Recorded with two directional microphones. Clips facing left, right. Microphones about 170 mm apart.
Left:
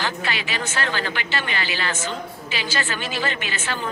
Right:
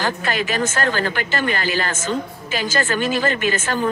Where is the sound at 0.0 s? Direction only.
45° right (ahead or behind).